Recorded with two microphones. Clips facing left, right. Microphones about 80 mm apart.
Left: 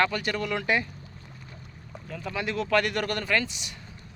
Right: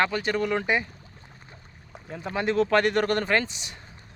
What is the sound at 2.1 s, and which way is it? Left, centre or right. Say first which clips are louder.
Speech: right 5 dB; right.